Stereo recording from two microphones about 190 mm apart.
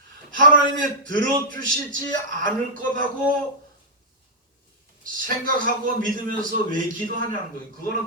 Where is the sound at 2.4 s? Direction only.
45° right (ahead or behind).